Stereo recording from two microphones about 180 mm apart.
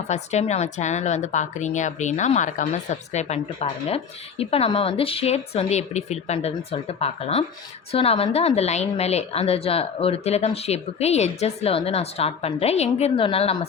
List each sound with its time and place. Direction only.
0.1 s speech: 40° left (ahead or behind)